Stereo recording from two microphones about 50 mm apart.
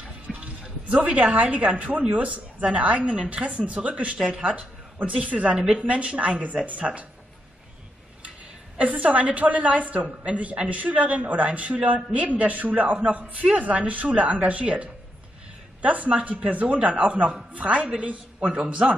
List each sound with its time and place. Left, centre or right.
0.3 s a man's voice: right
5.6 s speech: centre
5.9 s a man's voice: right
8.7 s a man's voice: right